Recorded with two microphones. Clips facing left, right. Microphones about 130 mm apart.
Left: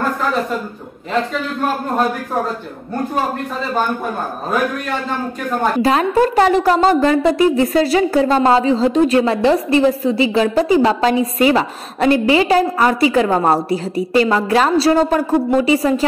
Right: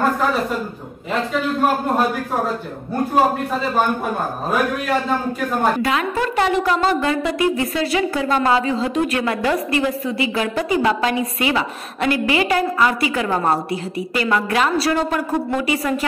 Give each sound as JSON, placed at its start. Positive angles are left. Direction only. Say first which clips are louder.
{"t": 5.8, "sound": "a woman's voice", "louder": "left 6 dB", "side_deg": 35}